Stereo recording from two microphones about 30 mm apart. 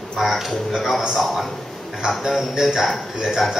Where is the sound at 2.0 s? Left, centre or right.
Right.